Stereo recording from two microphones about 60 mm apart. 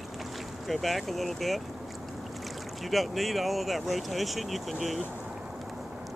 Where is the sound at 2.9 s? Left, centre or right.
Centre.